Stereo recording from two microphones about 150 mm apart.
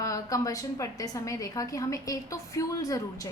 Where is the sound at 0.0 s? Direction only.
20° left (ahead or behind).